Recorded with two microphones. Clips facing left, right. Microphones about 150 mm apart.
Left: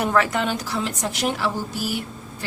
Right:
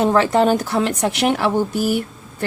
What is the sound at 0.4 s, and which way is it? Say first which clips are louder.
A woman's voice: right 8 dB; 50° right (ahead or behind).